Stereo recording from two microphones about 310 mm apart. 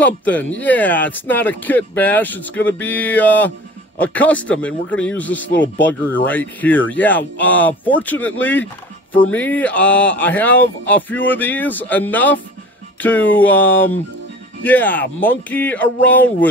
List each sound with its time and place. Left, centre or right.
0.0 s speech: centre